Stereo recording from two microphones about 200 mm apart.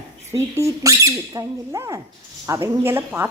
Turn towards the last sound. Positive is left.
turn(degrees=-10)  # may be behind; listen again after turning